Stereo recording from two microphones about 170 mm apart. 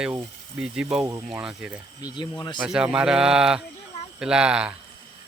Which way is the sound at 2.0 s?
25° left (ahead or behind).